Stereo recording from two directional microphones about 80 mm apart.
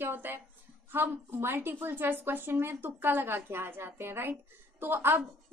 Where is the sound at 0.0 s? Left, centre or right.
Right.